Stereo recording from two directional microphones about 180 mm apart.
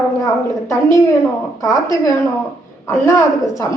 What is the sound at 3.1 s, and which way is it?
Speech, 15° left (ahead or behind).